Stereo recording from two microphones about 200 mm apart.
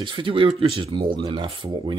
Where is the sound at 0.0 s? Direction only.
25° right (ahead or behind).